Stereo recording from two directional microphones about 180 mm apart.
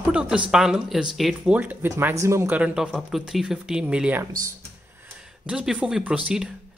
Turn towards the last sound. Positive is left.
turn(degrees=-5)  # may be behind; listen again after turning